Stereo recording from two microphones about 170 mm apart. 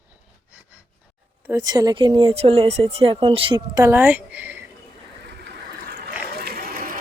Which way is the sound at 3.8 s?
15° right (ahead or behind).